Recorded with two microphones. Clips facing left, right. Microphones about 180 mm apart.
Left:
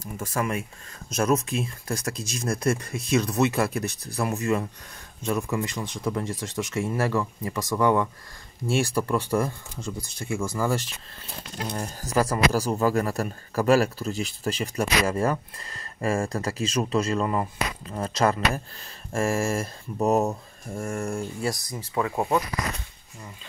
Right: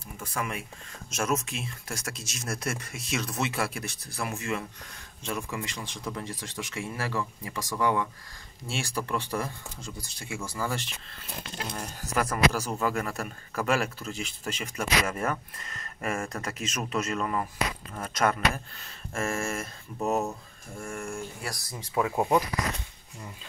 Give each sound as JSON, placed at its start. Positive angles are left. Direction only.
{"t": 0.2, "sound": "speech", "side_deg": 45}
{"t": 21.4, "sound": "speech", "side_deg": 20}
{"t": 21.7, "sound": "speech", "side_deg": -5}